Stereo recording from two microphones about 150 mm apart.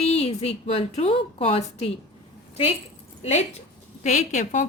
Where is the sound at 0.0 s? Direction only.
45° left (ahead or behind).